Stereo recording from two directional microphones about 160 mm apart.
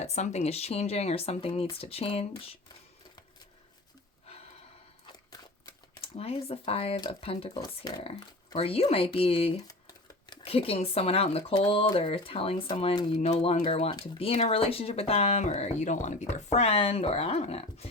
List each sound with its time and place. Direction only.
0.0 s speech: 45° left (ahead or behind)
6.0 s speech: 35° left (ahead or behind)
7.6 s speech: 25° left (ahead or behind)
8.5 s speech: 40° left (ahead or behind)